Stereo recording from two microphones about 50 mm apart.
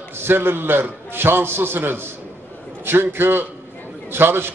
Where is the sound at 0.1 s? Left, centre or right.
Right.